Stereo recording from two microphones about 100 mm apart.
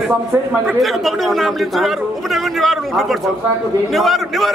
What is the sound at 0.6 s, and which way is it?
A man's voice, centre (ahead or behind).